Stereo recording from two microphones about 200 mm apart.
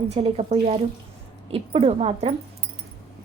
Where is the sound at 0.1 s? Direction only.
30° right (ahead or behind).